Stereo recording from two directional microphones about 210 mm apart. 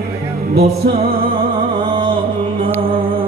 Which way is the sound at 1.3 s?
25° right (ahead or behind).